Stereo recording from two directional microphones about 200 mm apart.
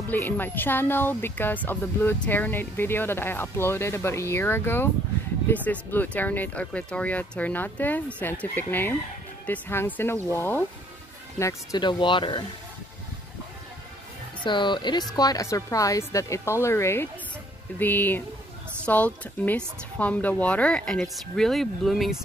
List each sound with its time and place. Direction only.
0.1 s speech: 10° left (ahead or behind)
14.4 s speech: 25° left (ahead or behind); by 22.2 s centre (ahead or behind)